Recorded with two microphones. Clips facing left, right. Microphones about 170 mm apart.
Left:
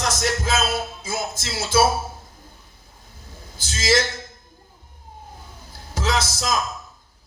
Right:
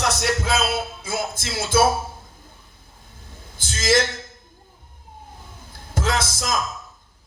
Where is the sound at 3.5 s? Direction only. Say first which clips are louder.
Right 1 dB; 55° right (ahead or behind).